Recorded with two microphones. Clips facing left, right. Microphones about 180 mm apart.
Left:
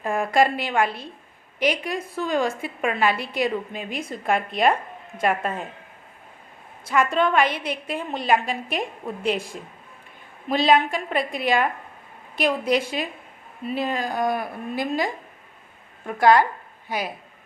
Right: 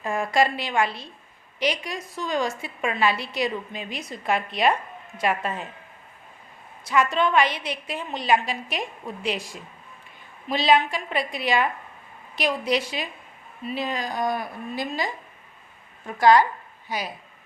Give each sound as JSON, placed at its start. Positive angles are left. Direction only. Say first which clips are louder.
{"t": 0.0, "sound": "a woman's voice", "louder": "left 2 dB", "side_deg": 55}
{"t": 6.8, "sound": "a woman's voice", "louder": "left 1 dB", "side_deg": 55}